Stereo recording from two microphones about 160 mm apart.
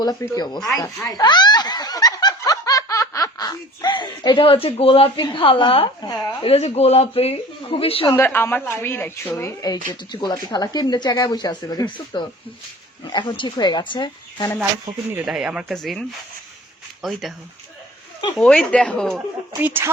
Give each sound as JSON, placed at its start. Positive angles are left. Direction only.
{"t": 0.0, "sound": "speech", "side_deg": 25}
{"t": 0.8, "sound": "snicker", "side_deg": 25}
{"t": 6.4, "sound": "speech", "side_deg": 40}
{"t": 8.1, "sound": "a woman's voice", "side_deg": 10}
{"t": 15.1, "sound": "speech", "side_deg": -5}
{"t": 18.3, "sound": "speech", "side_deg": 5}
{"t": 19.6, "sound": "speech", "side_deg": -15}